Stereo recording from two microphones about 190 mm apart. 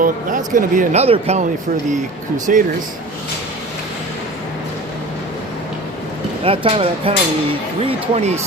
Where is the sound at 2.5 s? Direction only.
45° right (ahead or behind).